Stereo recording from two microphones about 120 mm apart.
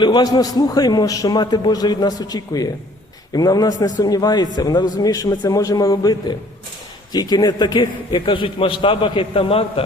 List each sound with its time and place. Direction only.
0.0 s a man's voice: 40° left (ahead or behind)